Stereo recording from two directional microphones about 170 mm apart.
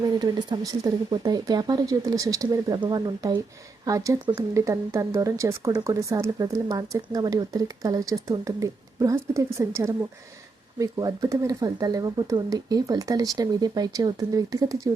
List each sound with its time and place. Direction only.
0.2 s speech: 25° right (ahead or behind)